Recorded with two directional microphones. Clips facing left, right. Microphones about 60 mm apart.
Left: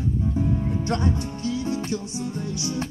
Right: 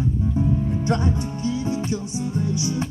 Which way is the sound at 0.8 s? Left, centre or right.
Centre.